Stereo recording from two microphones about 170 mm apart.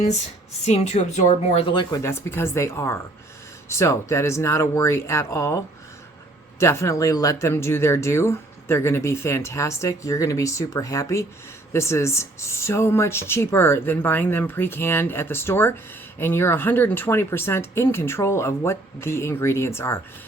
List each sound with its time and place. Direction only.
0.6 s a woman's voice: 40° left (ahead or behind); by 5.5 s 15° left (ahead or behind)
6.6 s speech: 15° left (ahead or behind)